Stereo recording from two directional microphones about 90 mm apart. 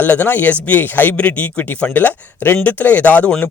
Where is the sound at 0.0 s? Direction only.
20° left (ahead or behind).